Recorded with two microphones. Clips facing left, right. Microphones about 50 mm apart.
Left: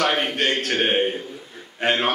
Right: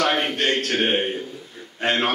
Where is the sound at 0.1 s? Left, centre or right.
Centre.